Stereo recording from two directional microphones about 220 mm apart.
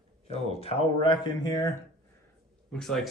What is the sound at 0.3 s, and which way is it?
Speech, 25° left (ahead or behind).